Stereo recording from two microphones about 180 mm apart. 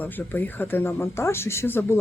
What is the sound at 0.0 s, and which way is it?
Speech, 10° left (ahead or behind).